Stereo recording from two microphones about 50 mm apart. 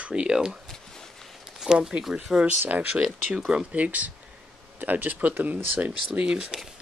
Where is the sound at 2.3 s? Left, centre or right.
Centre.